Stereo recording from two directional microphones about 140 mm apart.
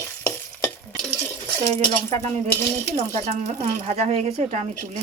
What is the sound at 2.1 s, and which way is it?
Speech, 55° right (ahead or behind).